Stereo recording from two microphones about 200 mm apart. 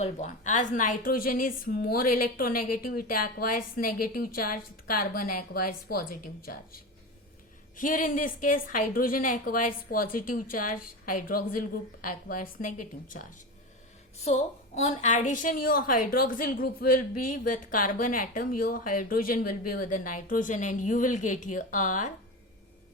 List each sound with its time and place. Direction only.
0.0 s a woman's voice: 35° left (ahead or behind)
14.3 s a woman's voice: 30° left (ahead or behind)